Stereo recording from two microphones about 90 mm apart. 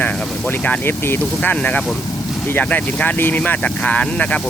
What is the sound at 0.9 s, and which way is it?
Speech, 25° left (ahead or behind).